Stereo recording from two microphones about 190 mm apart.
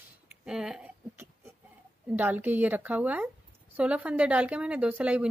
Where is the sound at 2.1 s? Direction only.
10° right (ahead or behind).